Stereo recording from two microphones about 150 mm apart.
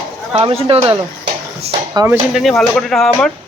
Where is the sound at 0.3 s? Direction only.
40° right (ahead or behind).